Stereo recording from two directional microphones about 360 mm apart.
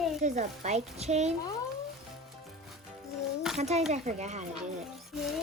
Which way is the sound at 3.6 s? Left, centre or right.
Centre.